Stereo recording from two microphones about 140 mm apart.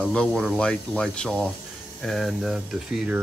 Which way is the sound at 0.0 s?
5° left (ahead or behind).